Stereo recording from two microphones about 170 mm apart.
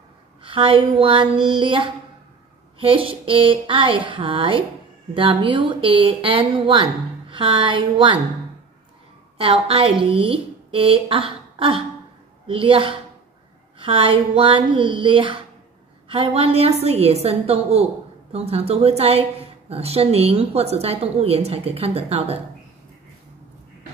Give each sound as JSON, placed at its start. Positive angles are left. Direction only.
{"t": 0.4, "sound": "a woman's voice", "side_deg": -30}
{"t": 9.4, "sound": "a woman's voice", "side_deg": -30}